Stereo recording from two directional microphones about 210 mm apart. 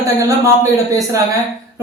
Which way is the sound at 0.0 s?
15° right (ahead or behind).